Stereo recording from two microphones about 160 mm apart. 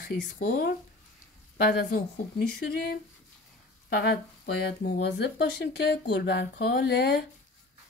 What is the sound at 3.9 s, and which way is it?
Speech, 80° left.